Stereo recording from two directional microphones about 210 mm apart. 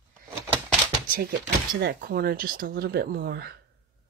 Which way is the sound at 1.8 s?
50° right (ahead or behind).